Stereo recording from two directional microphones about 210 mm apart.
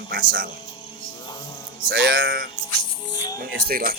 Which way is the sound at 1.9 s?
45° right (ahead or behind).